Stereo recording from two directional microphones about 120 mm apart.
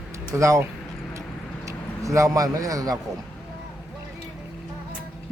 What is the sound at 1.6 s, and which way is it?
Speech, 25° right (ahead or behind).